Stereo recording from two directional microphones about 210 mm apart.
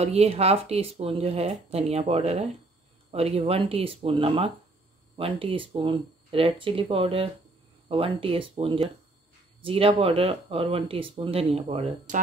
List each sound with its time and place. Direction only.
0.0 s speech: 30° right (ahead or behind)